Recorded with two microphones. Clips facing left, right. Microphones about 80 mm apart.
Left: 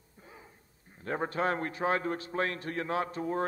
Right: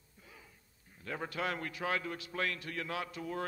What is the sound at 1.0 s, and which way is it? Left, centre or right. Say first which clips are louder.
A man's voice: left 7 dB; left.